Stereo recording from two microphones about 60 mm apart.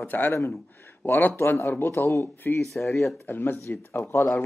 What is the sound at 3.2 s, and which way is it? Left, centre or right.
Speech, left.